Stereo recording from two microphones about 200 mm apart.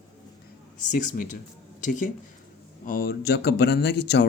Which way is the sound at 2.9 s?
45° left (ahead or behind).